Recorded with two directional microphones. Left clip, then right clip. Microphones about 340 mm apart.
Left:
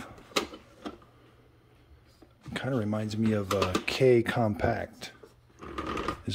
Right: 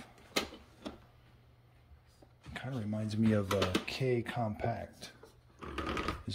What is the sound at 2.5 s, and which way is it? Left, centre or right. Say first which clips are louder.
Speech: left 10 dB; centre.